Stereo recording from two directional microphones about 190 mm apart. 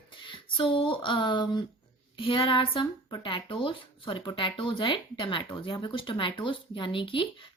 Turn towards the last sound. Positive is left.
turn(degrees=25)  # may be behind; listen again after turning